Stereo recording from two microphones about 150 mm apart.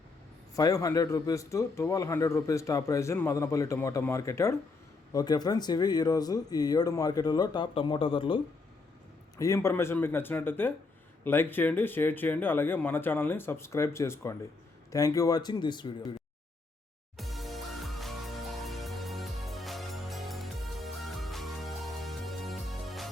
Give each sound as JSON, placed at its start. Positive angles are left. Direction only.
{"t": 0.5, "sound": "a man's voice", "side_deg": 25}
{"t": 9.4, "sound": "a man's voice", "side_deg": 20}
{"t": 17.2, "sound": "music", "side_deg": 0}